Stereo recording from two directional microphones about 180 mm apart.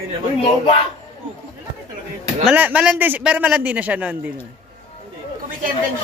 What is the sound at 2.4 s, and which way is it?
A man's voice, 5° right (ahead or behind).